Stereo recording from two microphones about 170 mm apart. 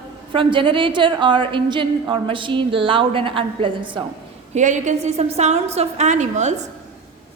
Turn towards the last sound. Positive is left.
turn(degrees=-45)  # may be behind; listen again after turning